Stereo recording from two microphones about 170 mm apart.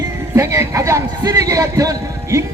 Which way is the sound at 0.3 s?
15° right (ahead or behind).